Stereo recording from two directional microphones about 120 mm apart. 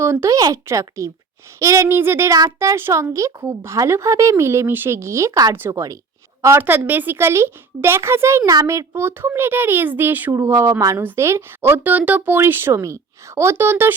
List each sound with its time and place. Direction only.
0.0 s a woman's voice: 25° right (ahead or behind)